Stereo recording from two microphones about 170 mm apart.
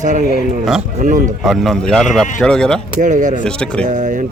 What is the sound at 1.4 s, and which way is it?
Speech, centre (ahead or behind).